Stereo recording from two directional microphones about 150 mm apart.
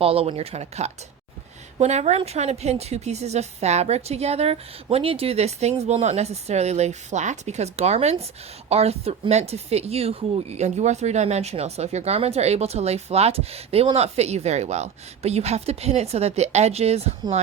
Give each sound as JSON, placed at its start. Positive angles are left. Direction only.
{"t": 0.0, "sound": "speech", "side_deg": -40}